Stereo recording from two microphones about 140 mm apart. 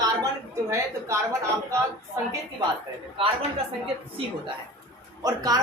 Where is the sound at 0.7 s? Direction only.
20° right (ahead or behind).